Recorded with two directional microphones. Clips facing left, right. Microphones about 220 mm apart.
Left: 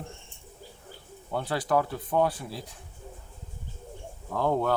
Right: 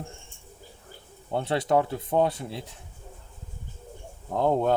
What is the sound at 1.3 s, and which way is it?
Speech, 25° right (ahead or behind).